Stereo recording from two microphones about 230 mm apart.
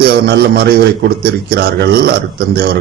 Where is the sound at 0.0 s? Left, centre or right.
Right.